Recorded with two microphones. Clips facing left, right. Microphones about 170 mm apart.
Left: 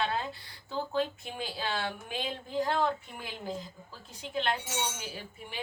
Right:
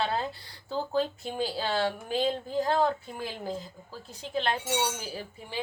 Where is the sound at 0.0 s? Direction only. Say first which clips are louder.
Right 2 dB; 35° right (ahead or behind).